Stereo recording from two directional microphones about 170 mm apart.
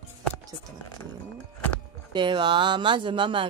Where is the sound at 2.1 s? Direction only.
25° right (ahead or behind).